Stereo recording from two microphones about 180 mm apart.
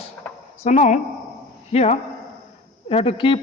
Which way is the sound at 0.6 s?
40° left (ahead or behind).